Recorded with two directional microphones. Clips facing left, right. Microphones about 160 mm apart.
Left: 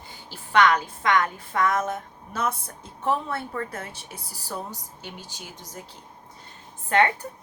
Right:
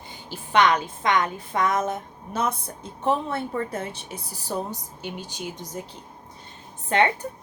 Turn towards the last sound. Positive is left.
turn(degrees=-20)  # may be behind; listen again after turning